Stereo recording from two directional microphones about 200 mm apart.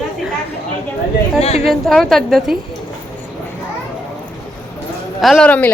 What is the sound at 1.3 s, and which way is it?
Speech, 30° left (ahead or behind).